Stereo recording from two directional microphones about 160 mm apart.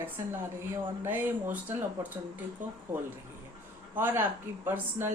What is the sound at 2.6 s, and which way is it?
Speech, 55° right (ahead or behind).